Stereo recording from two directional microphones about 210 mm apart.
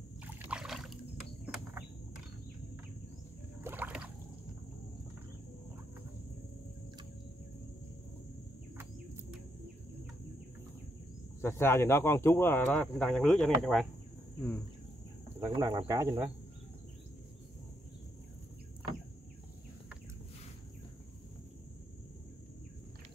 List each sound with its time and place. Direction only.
0.2 s a sound: 5° right (ahead or behind)
3.6 s rowboat: 10° right (ahead or behind)
11.4 s speech: 10° left (ahead or behind)
15.4 s speech: 20° right (ahead or behind)